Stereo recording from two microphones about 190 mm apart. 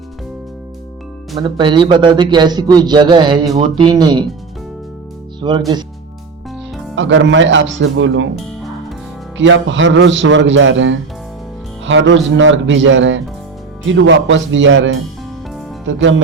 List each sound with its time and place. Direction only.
1.4 s a man's voice: 25° right (ahead or behind)
5.4 s a man's voice: 25° right (ahead or behind)
6.9 s speech: 85° right
9.4 s speech: 75° right (ahead or behind)
15.9 s speech: 75° right (ahead or behind)